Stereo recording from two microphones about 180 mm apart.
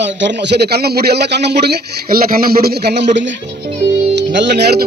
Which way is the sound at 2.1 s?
55° right (ahead or behind).